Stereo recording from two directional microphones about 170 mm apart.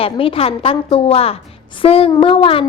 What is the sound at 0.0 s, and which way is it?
A woman's voice, 35° left (ahead or behind).